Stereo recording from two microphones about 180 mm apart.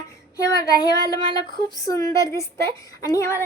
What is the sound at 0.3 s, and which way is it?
A woman's voice, 20° left (ahead or behind).